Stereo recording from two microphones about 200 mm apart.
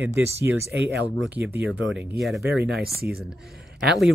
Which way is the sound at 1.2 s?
5° right (ahead or behind).